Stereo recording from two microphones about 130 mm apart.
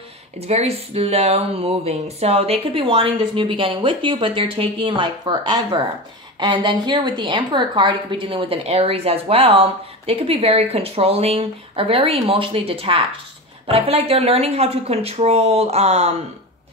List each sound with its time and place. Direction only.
0.4 s a woman's voice: 55° right (ahead or behind)